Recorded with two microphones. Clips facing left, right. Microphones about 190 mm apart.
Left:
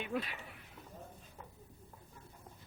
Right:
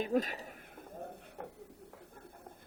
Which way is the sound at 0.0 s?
40° right (ahead or behind).